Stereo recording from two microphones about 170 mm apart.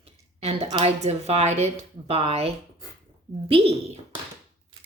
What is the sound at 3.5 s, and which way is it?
Speech, 35° right (ahead or behind).